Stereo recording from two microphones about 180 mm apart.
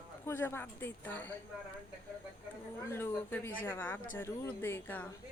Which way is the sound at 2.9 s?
10° left (ahead or behind).